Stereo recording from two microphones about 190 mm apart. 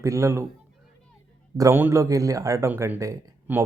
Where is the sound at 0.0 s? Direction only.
15° right (ahead or behind).